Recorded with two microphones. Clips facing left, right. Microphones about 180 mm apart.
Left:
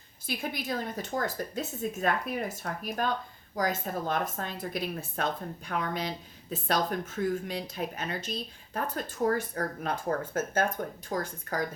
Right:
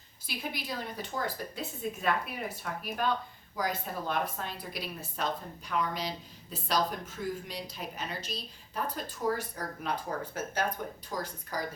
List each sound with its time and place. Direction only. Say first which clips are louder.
0.3 s speech: left 4 dB; 50° left (ahead or behind)